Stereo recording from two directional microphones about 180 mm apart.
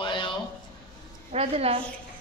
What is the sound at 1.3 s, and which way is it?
Speech, 35° right (ahead or behind).